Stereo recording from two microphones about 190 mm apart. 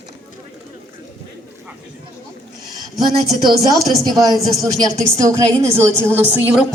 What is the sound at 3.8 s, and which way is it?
A woman's voice, 20° right (ahead or behind).